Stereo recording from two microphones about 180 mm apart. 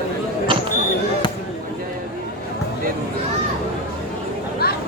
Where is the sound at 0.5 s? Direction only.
30° right (ahead or behind).